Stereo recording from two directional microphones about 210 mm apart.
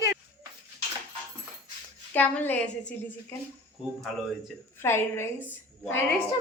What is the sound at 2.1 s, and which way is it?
A woman's voice, 5° left (ahead or behind).